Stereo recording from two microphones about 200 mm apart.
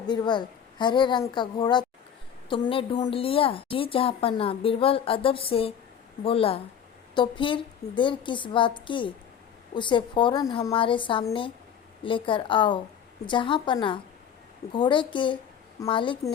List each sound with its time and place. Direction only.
0.1 s a woman's voice: 20° left (ahead or behind)